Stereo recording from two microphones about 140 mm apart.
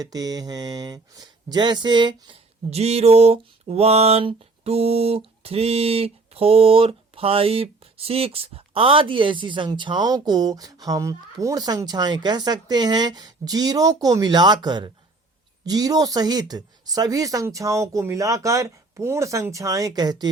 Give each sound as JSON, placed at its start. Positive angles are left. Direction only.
{"t": 0.0, "sound": "speech", "side_deg": -25}
{"t": 2.6, "sound": "mantra", "side_deg": -50}
{"t": 15.6, "sound": "speech", "side_deg": -25}